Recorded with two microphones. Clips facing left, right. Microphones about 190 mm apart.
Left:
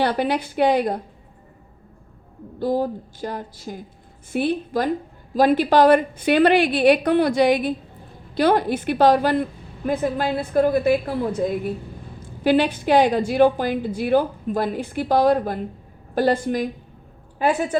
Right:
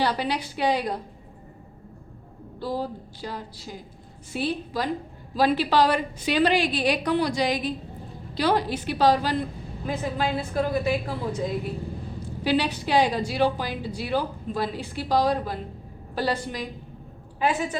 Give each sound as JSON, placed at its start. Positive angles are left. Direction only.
{"t": 0.0, "sound": "a woman's voice", "side_deg": 55}
{"t": 2.6, "sound": "a woman's voice", "side_deg": 50}